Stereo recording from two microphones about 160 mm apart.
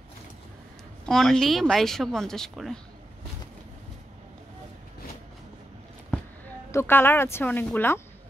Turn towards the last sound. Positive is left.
turn(degrees=10)  # may be behind; listen again after turning